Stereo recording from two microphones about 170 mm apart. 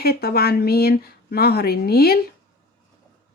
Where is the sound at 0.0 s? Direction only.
65° left (ahead or behind).